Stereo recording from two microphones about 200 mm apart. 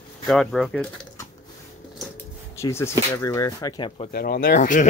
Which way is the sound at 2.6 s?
10° left (ahead or behind).